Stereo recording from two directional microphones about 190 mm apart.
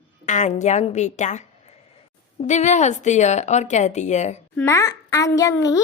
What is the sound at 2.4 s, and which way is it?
A woman's voice, 35° left (ahead or behind).